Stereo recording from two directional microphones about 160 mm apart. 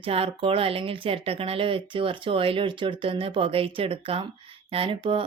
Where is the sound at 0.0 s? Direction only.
35° right (ahead or behind).